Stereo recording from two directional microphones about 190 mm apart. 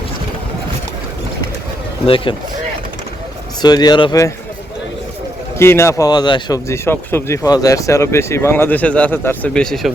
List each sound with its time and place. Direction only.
2.0 s speech: 30° left (ahead or behind)
3.6 s speech: 20° left (ahead or behind)
5.5 s speech: 15° left (ahead or behind)